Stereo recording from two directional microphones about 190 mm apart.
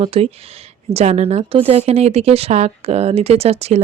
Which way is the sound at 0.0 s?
30° right (ahead or behind).